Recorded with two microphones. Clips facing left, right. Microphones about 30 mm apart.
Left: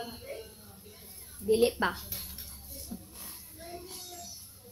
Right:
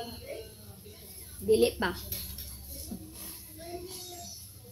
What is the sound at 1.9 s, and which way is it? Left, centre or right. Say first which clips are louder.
Speech: right 1 dB; right.